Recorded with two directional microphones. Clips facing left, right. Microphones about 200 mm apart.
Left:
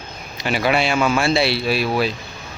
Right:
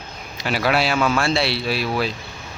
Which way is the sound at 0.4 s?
Centre (ahead or behind).